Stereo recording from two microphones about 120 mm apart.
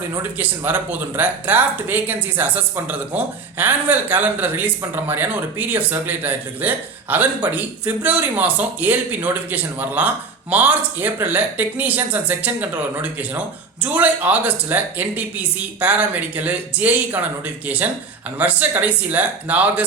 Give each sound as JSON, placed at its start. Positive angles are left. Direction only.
{"t": 0.2, "sound": "speech", "side_deg": -15}